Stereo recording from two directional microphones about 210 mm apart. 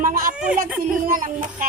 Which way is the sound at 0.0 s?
40° right (ahead or behind).